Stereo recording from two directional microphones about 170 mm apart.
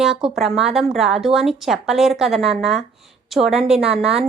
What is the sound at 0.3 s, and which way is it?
A woman's voice, centre (ahead or behind).